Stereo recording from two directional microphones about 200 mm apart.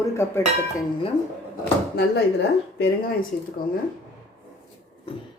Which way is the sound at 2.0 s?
55° left (ahead or behind).